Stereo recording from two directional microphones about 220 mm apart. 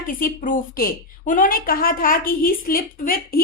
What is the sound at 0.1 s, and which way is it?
A woman's voice, 40° left (ahead or behind).